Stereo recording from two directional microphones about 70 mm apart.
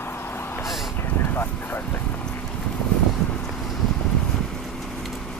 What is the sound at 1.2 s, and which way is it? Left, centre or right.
Vehicle, left.